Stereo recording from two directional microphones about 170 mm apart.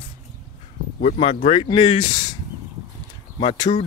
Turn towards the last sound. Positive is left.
turn(degrees=30)  # may be behind; listen again after turning